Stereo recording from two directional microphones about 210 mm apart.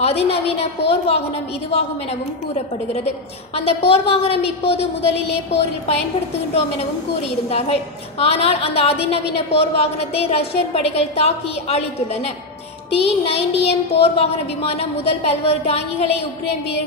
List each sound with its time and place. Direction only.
0.0 s a woman's voice: 30° left (ahead or behind)
3.5 s a woman's voice: 30° left (ahead or behind)